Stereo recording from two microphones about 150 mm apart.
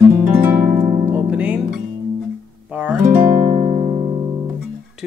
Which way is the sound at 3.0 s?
70° right (ahead or behind).